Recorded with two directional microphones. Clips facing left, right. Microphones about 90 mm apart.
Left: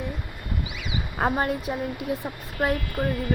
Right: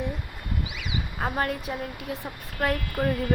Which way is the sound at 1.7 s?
20° left (ahead or behind).